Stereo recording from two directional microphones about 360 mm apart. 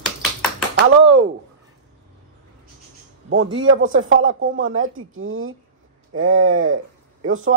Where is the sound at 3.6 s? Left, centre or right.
Right.